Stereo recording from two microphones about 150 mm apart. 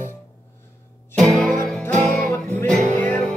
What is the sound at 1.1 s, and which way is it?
Music, 5° left (ahead or behind).